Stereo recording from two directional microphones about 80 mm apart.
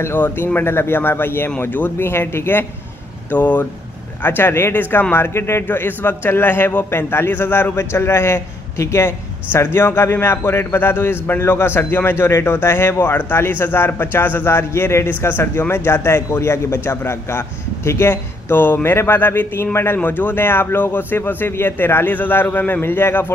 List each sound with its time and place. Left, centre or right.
0.0 s a man's voice: left